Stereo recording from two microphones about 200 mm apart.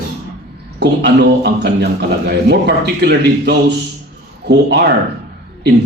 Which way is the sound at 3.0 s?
55° right (ahead or behind).